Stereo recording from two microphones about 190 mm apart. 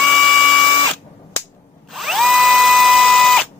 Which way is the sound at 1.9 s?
Centre (ahead or behind).